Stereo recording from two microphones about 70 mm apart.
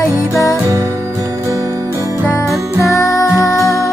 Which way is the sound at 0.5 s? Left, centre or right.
Right.